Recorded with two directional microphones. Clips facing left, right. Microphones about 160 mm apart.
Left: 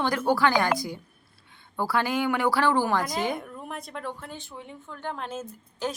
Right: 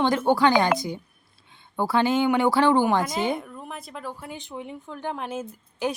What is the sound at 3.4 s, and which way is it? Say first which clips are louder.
A woman's voice: even; centre (ahead or behind).